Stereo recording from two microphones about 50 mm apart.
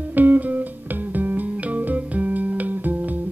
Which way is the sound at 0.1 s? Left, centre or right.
Right.